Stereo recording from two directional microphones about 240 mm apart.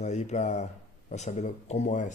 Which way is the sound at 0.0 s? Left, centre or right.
Left.